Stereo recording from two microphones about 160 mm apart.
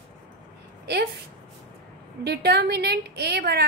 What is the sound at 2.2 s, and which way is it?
A woman's voice, 90° right.